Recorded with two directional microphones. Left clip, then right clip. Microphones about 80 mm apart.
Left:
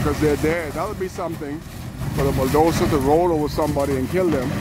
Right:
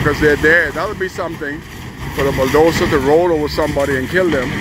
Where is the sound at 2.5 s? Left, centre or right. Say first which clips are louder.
Right 5 dB; left.